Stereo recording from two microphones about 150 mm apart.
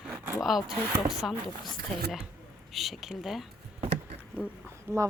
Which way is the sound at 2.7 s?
Centre (ahead or behind).